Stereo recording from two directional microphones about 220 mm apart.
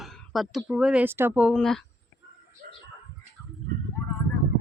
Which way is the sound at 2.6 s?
40° right (ahead or behind).